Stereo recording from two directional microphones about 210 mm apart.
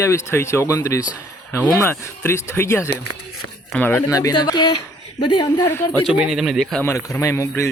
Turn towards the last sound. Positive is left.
turn(degrees=15)  # may be behind; listen again after turning